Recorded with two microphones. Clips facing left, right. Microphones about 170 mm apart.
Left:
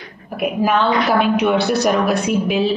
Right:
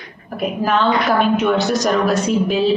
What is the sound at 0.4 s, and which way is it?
Speech, 10° left (ahead or behind).